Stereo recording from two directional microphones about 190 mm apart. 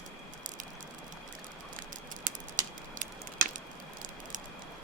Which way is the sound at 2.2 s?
45° right (ahead or behind).